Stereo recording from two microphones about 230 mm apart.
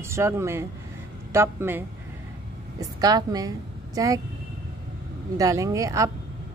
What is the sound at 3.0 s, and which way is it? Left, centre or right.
A woman's voice, centre.